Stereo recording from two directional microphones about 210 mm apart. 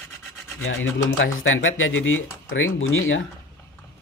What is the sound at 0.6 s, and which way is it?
Speech, 65° left (ahead or behind).